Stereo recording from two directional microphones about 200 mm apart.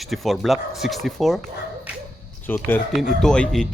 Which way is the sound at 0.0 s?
Centre (ahead or behind).